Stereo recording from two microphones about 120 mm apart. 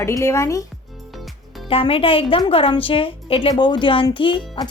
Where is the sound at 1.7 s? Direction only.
50° left (ahead or behind).